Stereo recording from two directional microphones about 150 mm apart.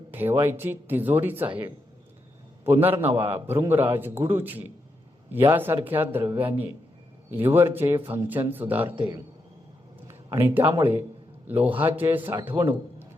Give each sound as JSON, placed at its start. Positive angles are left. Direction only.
{"t": 0.1, "sound": "speech", "side_deg": -15}
{"t": 2.6, "sound": "speech", "side_deg": -15}
{"t": 3.0, "sound": "a man's voice", "side_deg": -40}
{"t": 3.2, "sound": "speech", "side_deg": -15}
{"t": 10.1, "sound": "a sound", "side_deg": -15}
{"t": 10.8, "sound": "speech", "side_deg": -15}